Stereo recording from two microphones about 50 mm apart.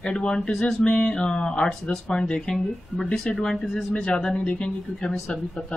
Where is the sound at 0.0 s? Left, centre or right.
Centre.